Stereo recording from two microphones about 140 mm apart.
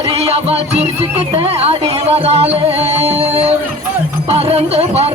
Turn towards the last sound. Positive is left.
turn(degrees=-45)  # may be behind; listen again after turning